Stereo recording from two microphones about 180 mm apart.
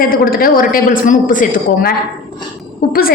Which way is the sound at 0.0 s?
55° left (ahead or behind).